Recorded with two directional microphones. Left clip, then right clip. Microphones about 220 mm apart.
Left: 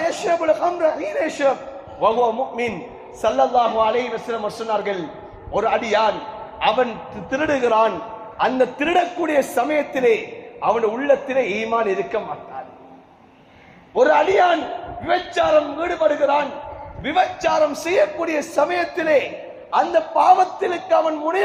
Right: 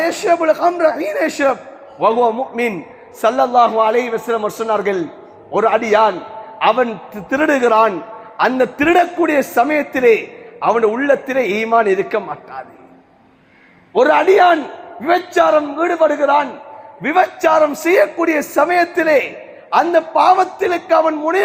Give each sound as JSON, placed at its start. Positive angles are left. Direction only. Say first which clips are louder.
{"t": 0.0, "sound": "a man's voice", "louder": "right 5 dB", "side_deg": -55}
{"t": 13.9, "sound": "a man's voice", "louder": "right 4 dB", "side_deg": -50}